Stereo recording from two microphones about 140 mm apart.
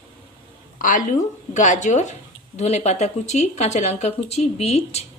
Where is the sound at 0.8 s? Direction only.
70° left (ahead or behind).